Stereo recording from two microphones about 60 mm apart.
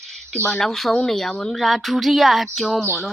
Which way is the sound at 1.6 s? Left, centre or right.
Centre.